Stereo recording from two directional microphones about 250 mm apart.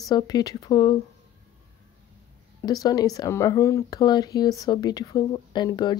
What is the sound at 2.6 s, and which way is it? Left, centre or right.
Speech, centre.